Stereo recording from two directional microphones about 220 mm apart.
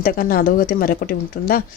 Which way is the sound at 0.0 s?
40° left (ahead or behind).